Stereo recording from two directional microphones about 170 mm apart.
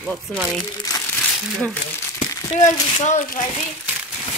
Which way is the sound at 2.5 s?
45° left (ahead or behind).